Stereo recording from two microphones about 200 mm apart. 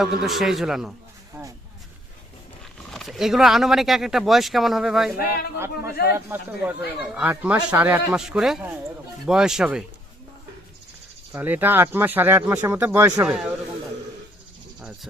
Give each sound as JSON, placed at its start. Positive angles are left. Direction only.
{"t": 0.0, "sound": "speech", "side_deg": 0}
{"t": 2.9, "sound": "speech", "side_deg": 0}
{"t": 5.1, "sound": "speech", "side_deg": 50}
{"t": 6.1, "sound": "speech", "side_deg": -10}
{"t": 11.3, "sound": "speech", "side_deg": -10}